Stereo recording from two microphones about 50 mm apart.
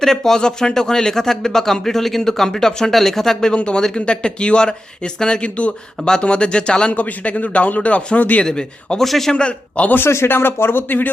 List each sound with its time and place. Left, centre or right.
0.0 s speech: centre
3.5 s speech: centre
8.4 s speech: centre
9.0 s a man's voice: centre
9.3 s speech: left
10.1 s speech: left